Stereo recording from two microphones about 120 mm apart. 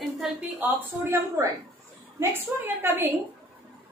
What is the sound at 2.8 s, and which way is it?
Speech, 20° right (ahead or behind).